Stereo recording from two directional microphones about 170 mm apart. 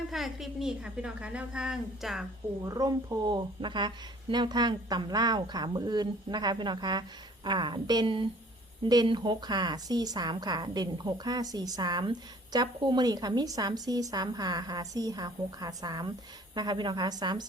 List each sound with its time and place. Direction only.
0.1 s a woman's voice: centre (ahead or behind)
2.6 s speech: 20° right (ahead or behind)